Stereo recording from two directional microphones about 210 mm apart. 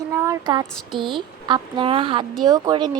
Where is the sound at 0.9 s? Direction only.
25° right (ahead or behind).